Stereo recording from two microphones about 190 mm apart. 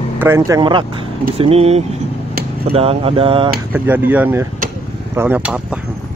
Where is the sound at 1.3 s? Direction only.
30° right (ahead or behind).